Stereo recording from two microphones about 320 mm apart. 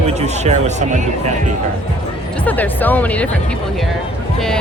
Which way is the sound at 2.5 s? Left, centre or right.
Centre.